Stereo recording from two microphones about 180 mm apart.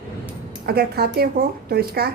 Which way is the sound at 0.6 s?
60° right (ahead or behind).